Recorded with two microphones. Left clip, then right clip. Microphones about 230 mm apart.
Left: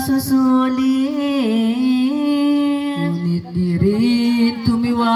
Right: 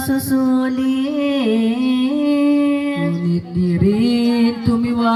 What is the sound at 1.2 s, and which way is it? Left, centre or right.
Humming, left.